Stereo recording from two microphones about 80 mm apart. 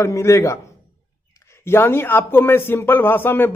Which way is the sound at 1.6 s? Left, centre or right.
Left.